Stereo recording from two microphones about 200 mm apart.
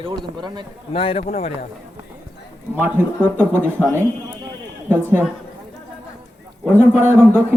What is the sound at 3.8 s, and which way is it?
Speech, 10° right (ahead or behind).